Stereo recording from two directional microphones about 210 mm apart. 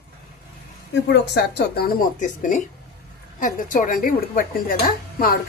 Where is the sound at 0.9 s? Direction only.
55° left (ahead or behind).